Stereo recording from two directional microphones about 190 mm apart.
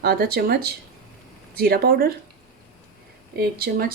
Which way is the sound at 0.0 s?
55° right (ahead or behind).